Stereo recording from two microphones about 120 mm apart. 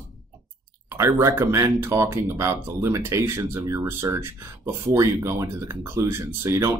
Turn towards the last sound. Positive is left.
turn(degrees=-25)  # may be behind; listen again after turning